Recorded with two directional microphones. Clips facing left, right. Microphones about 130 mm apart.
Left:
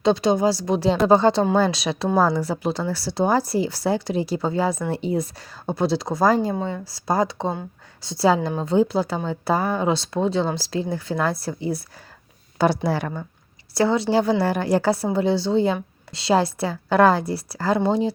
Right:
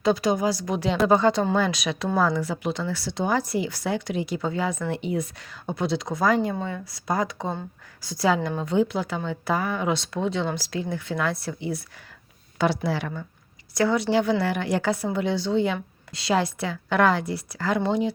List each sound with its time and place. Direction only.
0.0 s a woman's voice: 25° left (ahead or behind)
6.5 s a woman's voice: 25° left (ahead or behind); by 13.2 s 45° left (ahead or behind)
13.7 s a woman's voice: 30° left (ahead or behind)